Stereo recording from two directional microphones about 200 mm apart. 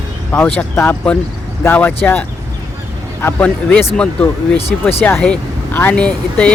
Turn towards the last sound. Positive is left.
turn(degrees=5)  # may be behind; listen again after turning